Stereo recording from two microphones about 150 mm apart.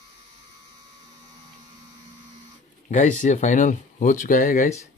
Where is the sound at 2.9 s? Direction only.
55° left (ahead or behind).